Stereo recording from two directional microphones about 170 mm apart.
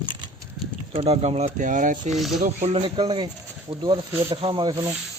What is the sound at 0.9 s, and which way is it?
Speech, 35° right (ahead or behind).